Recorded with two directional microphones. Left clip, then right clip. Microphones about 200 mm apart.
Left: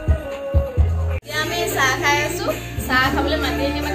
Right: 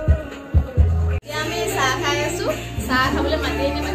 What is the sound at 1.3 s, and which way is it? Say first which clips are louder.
Music: left 2 dB; 10° right (ahead or behind).